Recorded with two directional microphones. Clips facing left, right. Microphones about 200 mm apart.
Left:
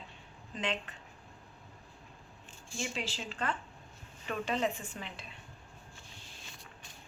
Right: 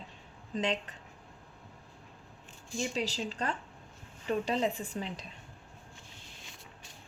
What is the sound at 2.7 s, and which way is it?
A woman's voice, 35° right (ahead or behind).